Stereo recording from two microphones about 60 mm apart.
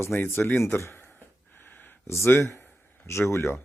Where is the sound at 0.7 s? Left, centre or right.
Left.